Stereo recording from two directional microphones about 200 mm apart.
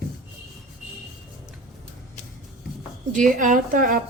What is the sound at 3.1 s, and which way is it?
Speech, 40° right (ahead or behind).